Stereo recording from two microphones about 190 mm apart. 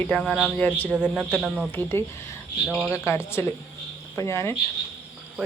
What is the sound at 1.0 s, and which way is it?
Speech, 5° right (ahead or behind).